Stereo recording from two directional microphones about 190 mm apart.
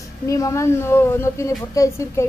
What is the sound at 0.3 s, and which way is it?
A woman's voice, 15° left (ahead or behind).